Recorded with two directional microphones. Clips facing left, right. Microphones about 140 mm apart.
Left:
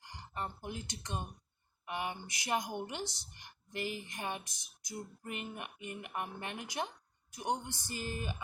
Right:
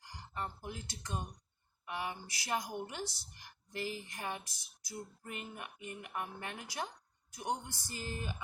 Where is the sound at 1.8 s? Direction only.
10° left (ahead or behind).